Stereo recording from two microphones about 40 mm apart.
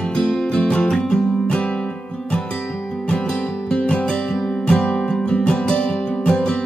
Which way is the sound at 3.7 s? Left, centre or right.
Left.